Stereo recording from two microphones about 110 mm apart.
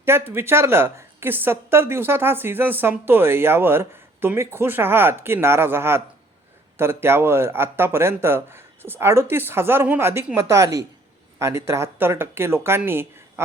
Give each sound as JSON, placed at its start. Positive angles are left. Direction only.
{"t": 0.0, "sound": "a woman's voice", "side_deg": -20}